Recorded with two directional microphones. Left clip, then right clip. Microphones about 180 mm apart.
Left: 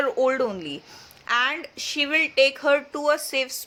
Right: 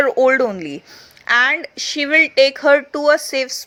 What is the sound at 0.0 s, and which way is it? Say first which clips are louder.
Speech: right 8 dB; 30° right (ahead or behind).